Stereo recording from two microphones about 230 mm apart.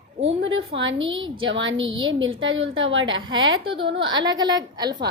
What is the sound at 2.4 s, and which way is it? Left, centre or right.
A woman's voice, right.